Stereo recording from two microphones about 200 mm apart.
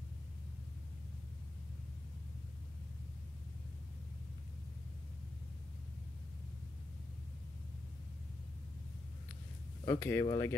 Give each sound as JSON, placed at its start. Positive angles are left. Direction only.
{"t": 9.8, "sound": "speech", "side_deg": 15}